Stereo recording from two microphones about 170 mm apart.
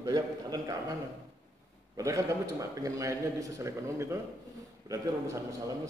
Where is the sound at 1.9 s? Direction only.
20° right (ahead or behind).